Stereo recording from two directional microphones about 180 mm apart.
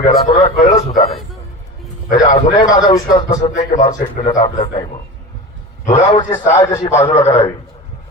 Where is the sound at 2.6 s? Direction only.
20° left (ahead or behind).